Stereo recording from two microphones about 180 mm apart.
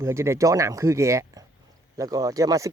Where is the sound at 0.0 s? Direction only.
15° right (ahead or behind).